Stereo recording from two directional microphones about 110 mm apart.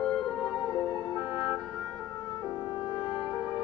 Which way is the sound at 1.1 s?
40° left (ahead or behind).